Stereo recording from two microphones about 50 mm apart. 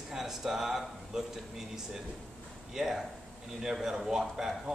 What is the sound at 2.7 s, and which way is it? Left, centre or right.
A man's voice, centre.